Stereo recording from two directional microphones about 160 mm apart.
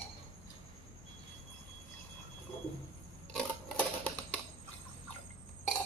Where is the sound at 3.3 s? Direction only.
10° left (ahead or behind).